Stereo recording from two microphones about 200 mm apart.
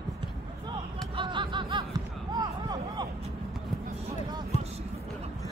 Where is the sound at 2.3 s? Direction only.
20° right (ahead or behind).